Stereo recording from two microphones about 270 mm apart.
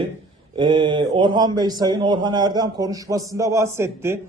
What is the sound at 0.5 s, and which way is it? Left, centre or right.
A man's voice, centre.